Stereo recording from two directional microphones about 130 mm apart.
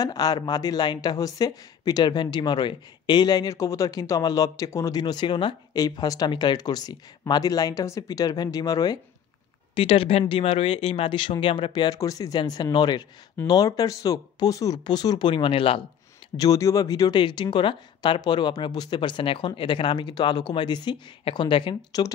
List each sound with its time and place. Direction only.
0.0 s speech: 30° left (ahead or behind)
9.8 s speech: 45° left (ahead or behind)
16.3 s speech: 25° left (ahead or behind); by 22.0 s 40° left (ahead or behind)